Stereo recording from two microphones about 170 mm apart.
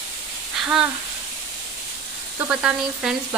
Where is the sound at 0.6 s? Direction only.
5° right (ahead or behind).